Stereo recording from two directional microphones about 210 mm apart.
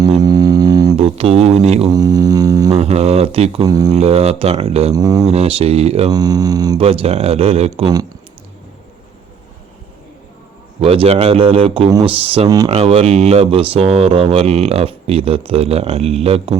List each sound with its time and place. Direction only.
0.2 s a sound: 20° right (ahead or behind)
1.0 s speech: 30° right (ahead or behind)
1.9 s mantra: 15° right (ahead or behind)
2.7 s speech: 30° right (ahead or behind)
3.9 s speech: 30° right (ahead or behind)
4.9 s mantra: 15° right (ahead or behind)
5.3 s speech: 30° right (ahead or behind)
6.1 s speech: 15° right (ahead or behind)
7.8 s speech: 20° right (ahead or behind)
10.8 s speech: 25° right (ahead or behind)
12.7 s speech: 30° right (ahead or behind)